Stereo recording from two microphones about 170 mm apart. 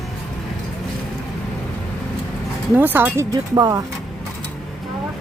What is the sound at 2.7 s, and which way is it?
Speech, 10° right (ahead or behind).